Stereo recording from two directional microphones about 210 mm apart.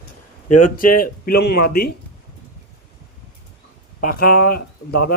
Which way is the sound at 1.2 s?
45° left (ahead or behind).